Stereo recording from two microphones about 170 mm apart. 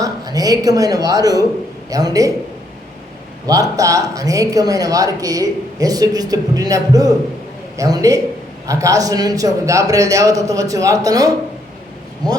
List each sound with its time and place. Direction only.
0.0 s speech: 20° right (ahead or behind)
3.4 s speech: 20° right (ahead or behind)